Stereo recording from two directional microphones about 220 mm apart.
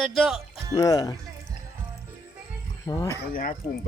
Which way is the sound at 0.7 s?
15° left (ahead or behind).